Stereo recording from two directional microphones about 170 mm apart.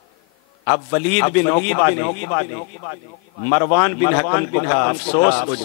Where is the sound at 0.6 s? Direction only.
20° left (ahead or behind).